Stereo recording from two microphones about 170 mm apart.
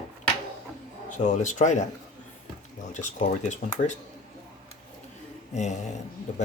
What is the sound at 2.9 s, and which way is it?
Speech, 45° left (ahead or behind).